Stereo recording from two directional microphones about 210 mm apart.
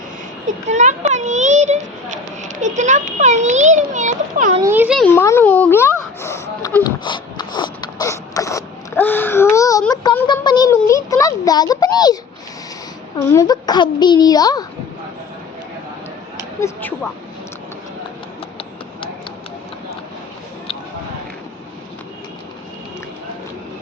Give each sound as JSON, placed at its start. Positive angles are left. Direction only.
{"t": 0.7, "sound": "a child's voice", "side_deg": -35}
{"t": 4.6, "sound": "a child's voice", "side_deg": -10}
{"t": 4.9, "sound": "a sound", "side_deg": 10}
{"t": 10.2, "sound": "a child's voice", "side_deg": 20}
{"t": 13.1, "sound": "a child's voice", "side_deg": 15}
{"t": 16.4, "sound": "speech", "side_deg": 15}